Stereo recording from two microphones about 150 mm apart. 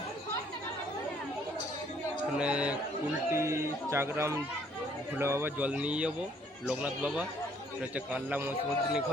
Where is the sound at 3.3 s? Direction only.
20° right (ahead or behind).